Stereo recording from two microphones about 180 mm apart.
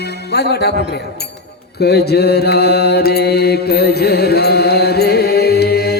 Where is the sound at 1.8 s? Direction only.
65° left (ahead or behind).